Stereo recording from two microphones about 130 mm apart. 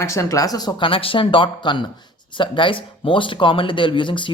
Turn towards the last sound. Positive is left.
turn(degrees=40)  # may be behind; listen again after turning